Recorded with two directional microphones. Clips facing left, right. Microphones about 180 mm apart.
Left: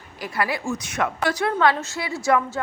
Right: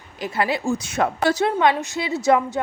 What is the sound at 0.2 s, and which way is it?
A woman's voice, 25° right (ahead or behind).